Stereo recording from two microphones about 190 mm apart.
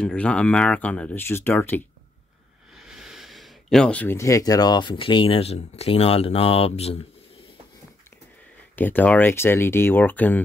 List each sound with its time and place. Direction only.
0.0 s speech: 5° left (ahead or behind)
2.8 s speech: centre (ahead or behind); by 7.0 s 30° left (ahead or behind)
8.7 s speech: 10° left (ahead or behind)